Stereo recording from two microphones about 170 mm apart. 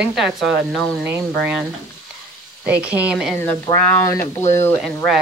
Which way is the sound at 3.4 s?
15° left (ahead or behind).